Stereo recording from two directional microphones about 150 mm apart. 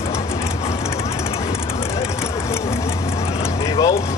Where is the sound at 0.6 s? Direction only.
45° left (ahead or behind).